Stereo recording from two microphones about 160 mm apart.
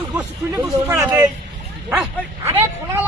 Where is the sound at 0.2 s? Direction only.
20° right (ahead or behind).